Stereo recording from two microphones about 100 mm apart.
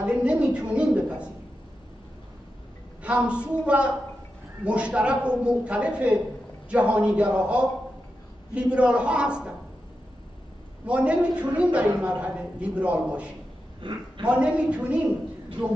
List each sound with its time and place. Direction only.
0.0 s a sound: 10° right (ahead or behind)
3.0 s a woman's voice: 10° right (ahead or behind)
10.9 s a man's voice: 10° right (ahead or behind)
13.8 s a woman's voice: 55° right (ahead or behind)
14.2 s a man's voice: 10° right (ahead or behind)